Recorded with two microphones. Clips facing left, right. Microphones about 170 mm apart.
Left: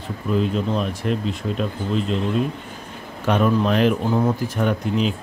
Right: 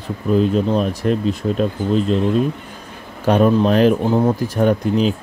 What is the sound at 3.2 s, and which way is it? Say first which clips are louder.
Speech: right 5 dB; 35° right (ahead or behind).